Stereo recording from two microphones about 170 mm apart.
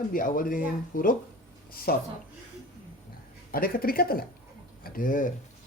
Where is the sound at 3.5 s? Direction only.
60° left (ahead or behind).